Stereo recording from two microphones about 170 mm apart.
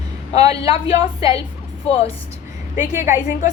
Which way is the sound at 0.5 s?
35° left (ahead or behind).